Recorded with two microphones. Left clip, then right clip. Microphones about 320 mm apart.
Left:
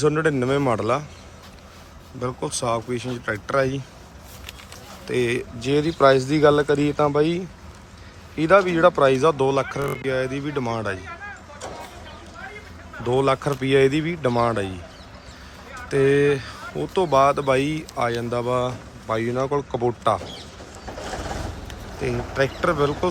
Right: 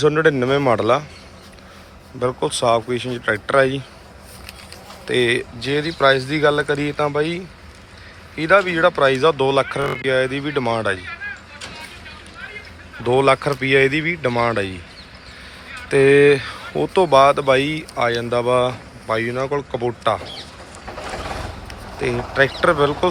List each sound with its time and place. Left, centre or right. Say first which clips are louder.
0.0 s speech: right 5 dB; centre
2.2 s speech: right 7 dB; centre
5.0 s speech: right 5 dB; centre
11.6 s a sound: left 2 dB; centre
13.1 s speech: right 5 dB; centre
15.9 s speech: right 6 dB; centre
22.4 s speech: right 6 dB; centre